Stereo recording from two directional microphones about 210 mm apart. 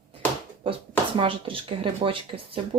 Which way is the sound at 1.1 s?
25° right (ahead or behind).